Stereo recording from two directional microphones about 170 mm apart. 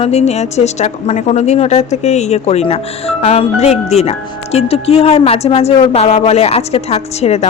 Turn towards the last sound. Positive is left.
turn(degrees=40)  # may be behind; listen again after turning